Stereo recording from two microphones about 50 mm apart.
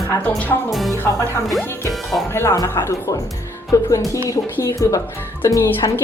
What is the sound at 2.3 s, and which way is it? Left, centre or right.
Speech, left.